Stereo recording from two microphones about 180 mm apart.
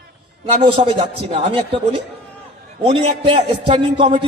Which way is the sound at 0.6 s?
30° right (ahead or behind).